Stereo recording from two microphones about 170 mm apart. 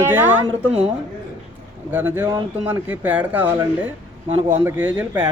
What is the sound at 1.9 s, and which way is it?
Speech, 10° right (ahead or behind).